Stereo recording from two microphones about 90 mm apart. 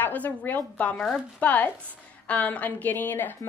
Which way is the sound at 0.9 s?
5° left (ahead or behind).